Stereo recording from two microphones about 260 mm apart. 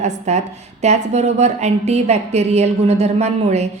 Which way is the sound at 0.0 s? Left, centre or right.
Right.